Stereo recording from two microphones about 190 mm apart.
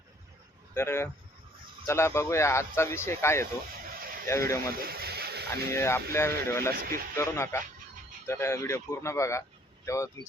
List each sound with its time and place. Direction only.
0.7 s speech: 15° left (ahead or behind)
4.8 s a sound: 55° right (ahead or behind)
5.7 s speech: 15° left (ahead or behind)
6.7 s speech: 50° right (ahead or behind)
7.2 s speech: 15° left (ahead or behind)